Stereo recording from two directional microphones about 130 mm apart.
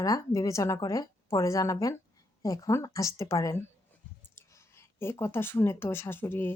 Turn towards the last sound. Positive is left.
turn(degrees=15)  # may be behind; listen again after turning